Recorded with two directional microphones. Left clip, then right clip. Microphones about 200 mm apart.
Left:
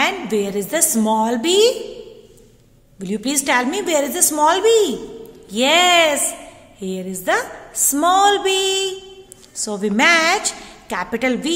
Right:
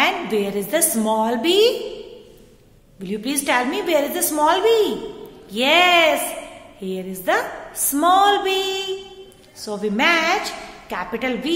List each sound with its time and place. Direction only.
0.0 s a woman's voice: 30° left (ahead or behind)
3.0 s a woman's voice: 35° left (ahead or behind)